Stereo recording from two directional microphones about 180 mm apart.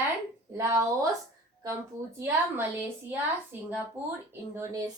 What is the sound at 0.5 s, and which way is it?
Speech, 15° right (ahead or behind).